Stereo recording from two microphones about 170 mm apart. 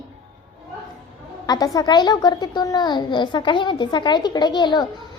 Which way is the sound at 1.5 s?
20° left (ahead or behind).